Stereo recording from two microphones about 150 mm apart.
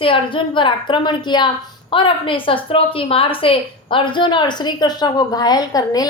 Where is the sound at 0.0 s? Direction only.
35° left (ahead or behind).